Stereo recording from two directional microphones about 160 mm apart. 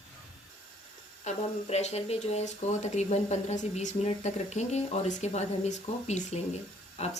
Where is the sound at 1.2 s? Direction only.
45° left (ahead or behind).